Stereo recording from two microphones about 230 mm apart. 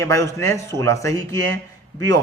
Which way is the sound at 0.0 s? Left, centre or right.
Centre.